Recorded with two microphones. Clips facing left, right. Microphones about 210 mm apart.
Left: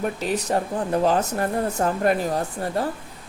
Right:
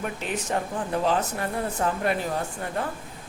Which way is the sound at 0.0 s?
40° left (ahead or behind).